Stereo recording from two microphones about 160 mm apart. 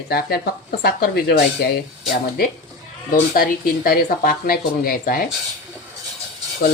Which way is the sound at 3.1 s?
65° left (ahead or behind).